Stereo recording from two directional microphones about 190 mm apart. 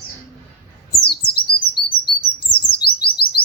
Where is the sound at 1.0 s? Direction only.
55° left (ahead or behind).